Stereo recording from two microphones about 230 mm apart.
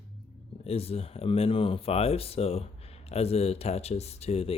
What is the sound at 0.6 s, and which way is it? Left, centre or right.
Speech, left.